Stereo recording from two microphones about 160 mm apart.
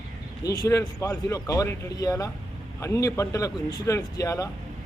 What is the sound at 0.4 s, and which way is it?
Speech, 20° left (ahead or behind).